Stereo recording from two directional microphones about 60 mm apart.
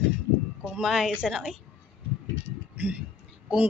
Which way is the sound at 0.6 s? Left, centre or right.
Centre.